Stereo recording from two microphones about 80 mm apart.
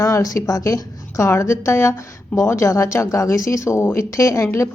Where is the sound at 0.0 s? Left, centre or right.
Left.